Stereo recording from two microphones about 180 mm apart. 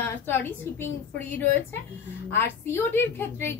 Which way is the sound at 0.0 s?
10° left (ahead or behind).